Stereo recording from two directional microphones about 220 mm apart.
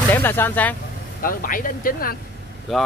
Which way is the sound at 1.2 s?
40° left (ahead or behind).